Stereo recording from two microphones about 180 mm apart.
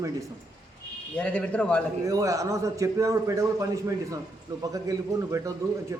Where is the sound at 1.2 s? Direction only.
5° left (ahead or behind).